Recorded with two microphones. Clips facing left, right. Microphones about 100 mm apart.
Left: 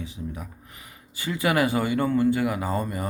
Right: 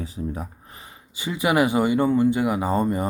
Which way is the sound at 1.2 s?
20° right (ahead or behind).